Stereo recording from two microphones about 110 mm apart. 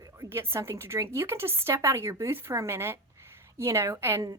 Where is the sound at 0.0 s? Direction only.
25° right (ahead or behind).